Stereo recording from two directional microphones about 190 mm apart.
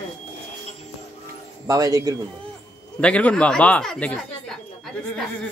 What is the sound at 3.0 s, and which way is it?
Speech, 5° left (ahead or behind).